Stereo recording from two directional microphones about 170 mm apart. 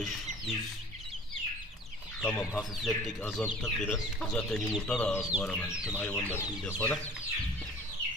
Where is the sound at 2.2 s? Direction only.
10° left (ahead or behind).